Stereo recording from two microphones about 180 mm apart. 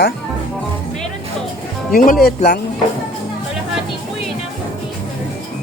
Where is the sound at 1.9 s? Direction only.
50° left (ahead or behind).